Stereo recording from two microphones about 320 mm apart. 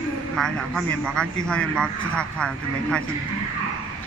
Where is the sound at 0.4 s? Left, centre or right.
Centre.